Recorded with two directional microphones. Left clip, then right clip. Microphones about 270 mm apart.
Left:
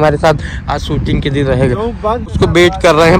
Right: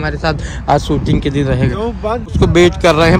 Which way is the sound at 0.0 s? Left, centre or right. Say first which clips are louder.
Left 8 dB; centre.